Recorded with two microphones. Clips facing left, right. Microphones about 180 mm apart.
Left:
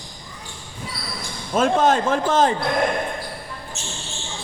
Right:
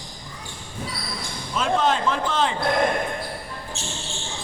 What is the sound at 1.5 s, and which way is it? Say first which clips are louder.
Speech: left 5 dB; 45° left (ahead or behind).